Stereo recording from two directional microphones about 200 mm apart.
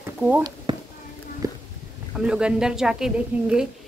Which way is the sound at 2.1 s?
5° right (ahead or behind).